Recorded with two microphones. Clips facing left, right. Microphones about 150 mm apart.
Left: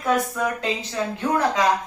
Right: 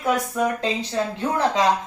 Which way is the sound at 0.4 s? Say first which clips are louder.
Right 3 dB; 20° right (ahead or behind).